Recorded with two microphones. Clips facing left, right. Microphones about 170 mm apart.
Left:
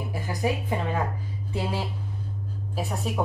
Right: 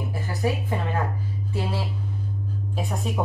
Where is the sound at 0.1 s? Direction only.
15° left (ahead or behind).